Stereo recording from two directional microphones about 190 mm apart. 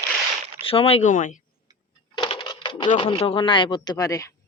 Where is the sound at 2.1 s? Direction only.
25° left (ahead or behind).